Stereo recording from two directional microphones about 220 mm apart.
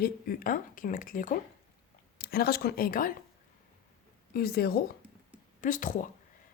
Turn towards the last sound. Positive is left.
turn(degrees=35)  # may be behind; listen again after turning